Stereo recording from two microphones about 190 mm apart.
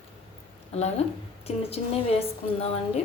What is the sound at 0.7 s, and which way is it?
A woman's voice, 30° left (ahead or behind).